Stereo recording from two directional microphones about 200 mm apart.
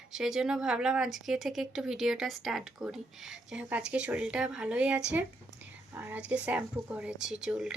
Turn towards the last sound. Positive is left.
turn(degrees=-5)  # may be behind; listen again after turning